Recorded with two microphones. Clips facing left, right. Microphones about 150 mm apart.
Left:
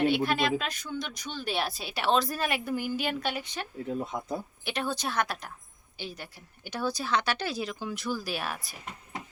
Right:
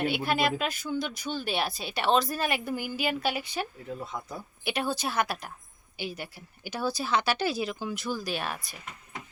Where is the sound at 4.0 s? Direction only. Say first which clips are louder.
Left 5 dB; 20° left (ahead or behind).